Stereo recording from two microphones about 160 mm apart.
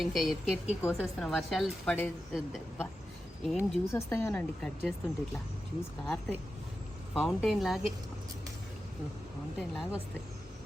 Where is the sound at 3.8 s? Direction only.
15° left (ahead or behind).